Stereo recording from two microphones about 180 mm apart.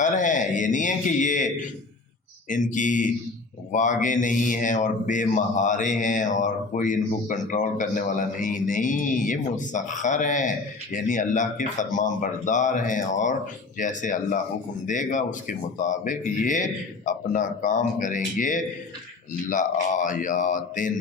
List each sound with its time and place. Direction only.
0.0 s speech: 45° left (ahead or behind)
2.5 s mantra: 45° left (ahead or behind)